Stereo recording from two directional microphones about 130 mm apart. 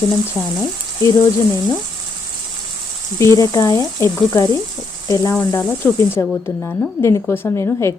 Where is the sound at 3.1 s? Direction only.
25° left (ahead or behind).